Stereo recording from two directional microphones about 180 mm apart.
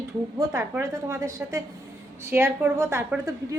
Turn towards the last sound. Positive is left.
turn(degrees=-15)  # may be behind; listen again after turning